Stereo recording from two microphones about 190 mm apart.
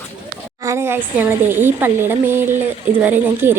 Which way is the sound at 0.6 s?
15° right (ahead or behind).